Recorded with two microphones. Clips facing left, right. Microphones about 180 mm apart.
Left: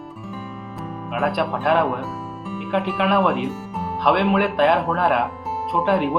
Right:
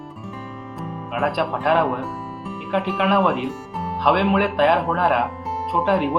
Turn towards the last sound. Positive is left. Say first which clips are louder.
# even
turn(degrees=0)  # may be behind; listen again after turning